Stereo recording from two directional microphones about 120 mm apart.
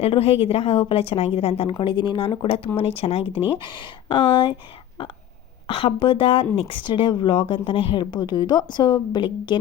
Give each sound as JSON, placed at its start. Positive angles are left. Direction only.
{"t": 0.0, "sound": "a woman's voice", "side_deg": 55}
{"t": 1.8, "sound": "a woman's voice", "side_deg": 40}
{"t": 3.6, "sound": "speech", "side_deg": 40}
{"t": 5.6, "sound": "a woman's voice", "side_deg": 50}